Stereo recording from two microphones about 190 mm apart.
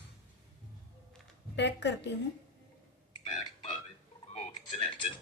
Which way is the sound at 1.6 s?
65° left (ahead or behind).